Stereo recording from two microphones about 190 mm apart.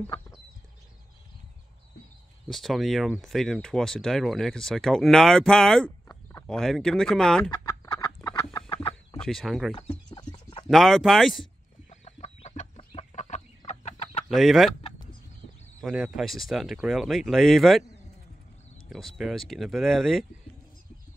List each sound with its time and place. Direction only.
2.4 s speech: centre (ahead or behind)
7.6 s chicken: 15° left (ahead or behind)
9.2 s speech: centre (ahead or behind)
9.8 s a sound: 30° left (ahead or behind)
10.7 s speech: centre (ahead or behind)
11.9 s chicken: 35° left (ahead or behind)
14.3 s speech: centre (ahead or behind)
14.8 s chicken: 30° left (ahead or behind)
15.8 s speech: centre (ahead or behind)
18.9 s speech: centre (ahead or behind)